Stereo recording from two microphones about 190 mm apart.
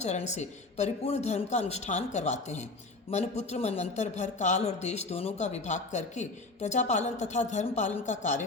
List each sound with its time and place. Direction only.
0.0 s speech: 35° left (ahead or behind)